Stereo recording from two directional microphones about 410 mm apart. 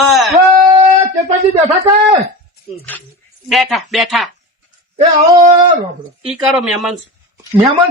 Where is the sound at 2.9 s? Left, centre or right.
Centre.